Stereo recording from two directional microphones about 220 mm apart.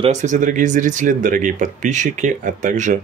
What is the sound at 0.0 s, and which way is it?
Speech, 30° right (ahead or behind).